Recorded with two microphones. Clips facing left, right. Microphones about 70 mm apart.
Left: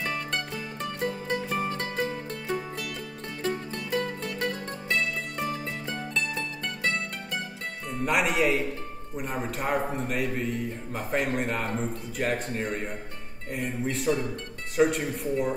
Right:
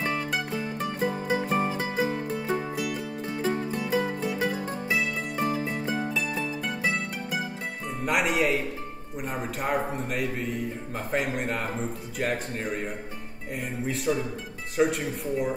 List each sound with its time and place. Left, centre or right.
0.0 s music: centre
1.4 s music: right
1.7 s music: centre
8.0 s speech: centre